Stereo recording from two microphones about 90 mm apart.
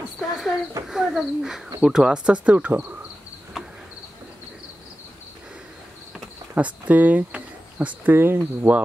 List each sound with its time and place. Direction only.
0.2 s a sound: centre (ahead or behind)
0.8 s speech: 5° right (ahead or behind)
6.5 s speech: 20° right (ahead or behind)